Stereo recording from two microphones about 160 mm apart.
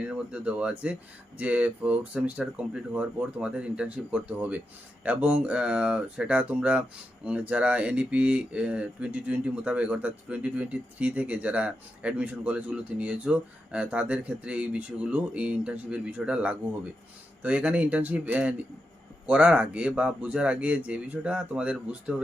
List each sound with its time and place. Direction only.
0.1 s speech: 5° right (ahead or behind)